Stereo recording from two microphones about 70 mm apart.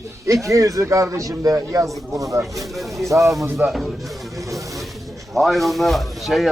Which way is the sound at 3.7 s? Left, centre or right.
Centre.